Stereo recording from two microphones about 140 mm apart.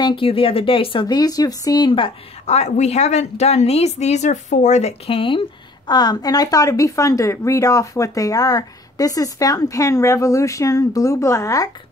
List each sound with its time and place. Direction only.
0.0 s speech: 40° left (ahead or behind)
5.9 s speech: 30° left (ahead or behind)